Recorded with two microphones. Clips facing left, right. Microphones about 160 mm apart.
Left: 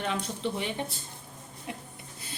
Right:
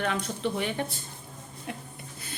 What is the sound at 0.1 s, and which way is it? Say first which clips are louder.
Speech: right 2 dB; 25° left (ahead or behind).